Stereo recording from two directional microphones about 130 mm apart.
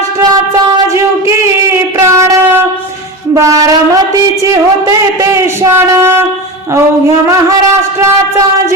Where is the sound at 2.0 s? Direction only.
20° right (ahead or behind).